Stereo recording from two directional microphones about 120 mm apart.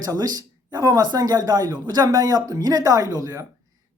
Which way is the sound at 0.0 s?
30° right (ahead or behind).